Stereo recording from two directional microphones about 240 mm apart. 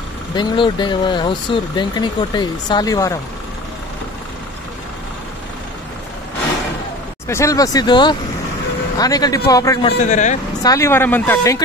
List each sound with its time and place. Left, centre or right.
0.4 s speech: centre
7.2 s a man's voice: centre; by 10.3 s left
10.6 s a man's voice: centre